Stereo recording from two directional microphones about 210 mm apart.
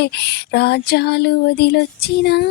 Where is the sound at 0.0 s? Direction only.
55° left (ahead or behind).